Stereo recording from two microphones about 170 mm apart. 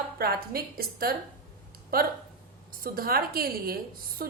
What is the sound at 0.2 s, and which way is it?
Speech, 65° right (ahead or behind).